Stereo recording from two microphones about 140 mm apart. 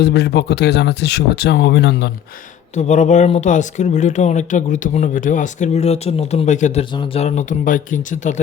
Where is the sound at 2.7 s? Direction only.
55° left (ahead or behind).